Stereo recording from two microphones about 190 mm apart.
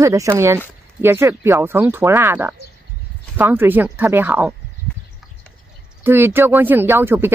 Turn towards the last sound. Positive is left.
turn(degrees=-10)  # may be behind; listen again after turning